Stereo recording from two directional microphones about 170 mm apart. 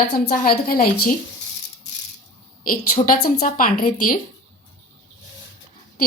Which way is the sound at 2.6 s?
55° left (ahead or behind).